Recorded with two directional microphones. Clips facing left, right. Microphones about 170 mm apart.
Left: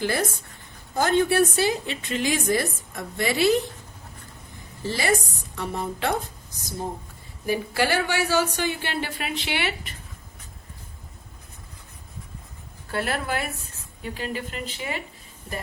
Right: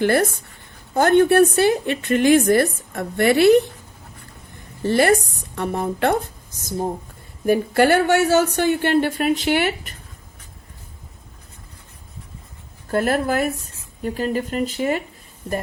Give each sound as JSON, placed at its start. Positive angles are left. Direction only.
{"t": 0.0, "sound": "a woman's voice", "side_deg": -60}
{"t": 4.8, "sound": "a woman's voice", "side_deg": -60}
{"t": 12.9, "sound": "a woman's voice", "side_deg": -45}